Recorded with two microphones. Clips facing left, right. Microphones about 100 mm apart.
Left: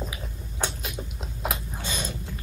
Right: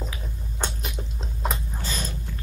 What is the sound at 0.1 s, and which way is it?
Chewing, 10° left (ahead or behind).